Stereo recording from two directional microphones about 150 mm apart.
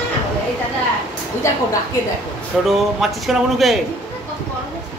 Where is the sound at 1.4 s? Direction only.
20° left (ahead or behind).